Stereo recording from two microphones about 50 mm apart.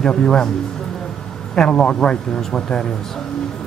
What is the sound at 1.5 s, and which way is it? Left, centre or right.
Speech, centre.